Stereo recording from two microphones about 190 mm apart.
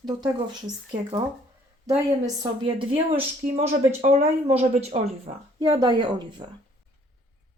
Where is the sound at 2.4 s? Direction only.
25° right (ahead or behind).